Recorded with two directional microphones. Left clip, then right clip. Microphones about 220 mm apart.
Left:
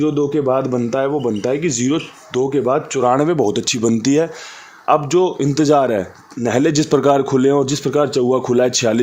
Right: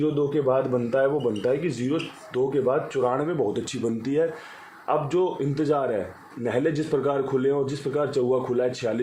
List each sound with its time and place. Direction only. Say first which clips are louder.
0.0 s speech: left 6 dB; 50° left (ahead or behind)